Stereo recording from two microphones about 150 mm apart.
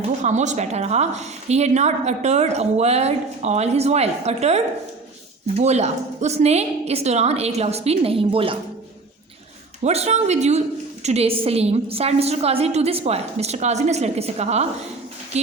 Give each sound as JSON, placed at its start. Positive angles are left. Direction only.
{"t": 0.2, "sound": "a woman's voice", "side_deg": -50}
{"t": 9.8, "sound": "a woman's voice", "side_deg": -45}